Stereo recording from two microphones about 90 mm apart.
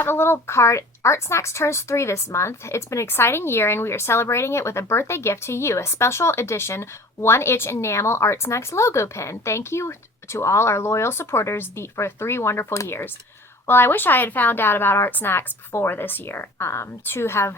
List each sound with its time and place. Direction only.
0.0 s speech: 25° left (ahead or behind)